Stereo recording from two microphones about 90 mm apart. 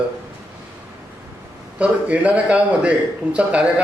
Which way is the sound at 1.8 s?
15° right (ahead or behind).